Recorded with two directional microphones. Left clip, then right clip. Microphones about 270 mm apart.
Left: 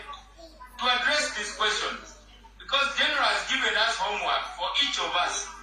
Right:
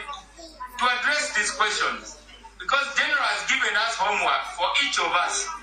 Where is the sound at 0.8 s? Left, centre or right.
Right.